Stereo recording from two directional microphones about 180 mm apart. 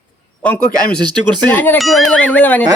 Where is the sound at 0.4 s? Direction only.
5° left (ahead or behind).